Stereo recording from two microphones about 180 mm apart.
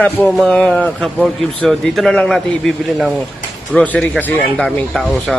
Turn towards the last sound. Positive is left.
turn(degrees=0)  # may be behind; listen again after turning